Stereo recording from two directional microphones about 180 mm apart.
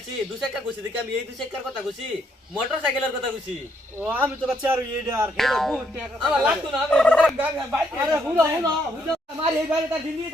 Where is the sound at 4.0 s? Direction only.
10° right (ahead or behind).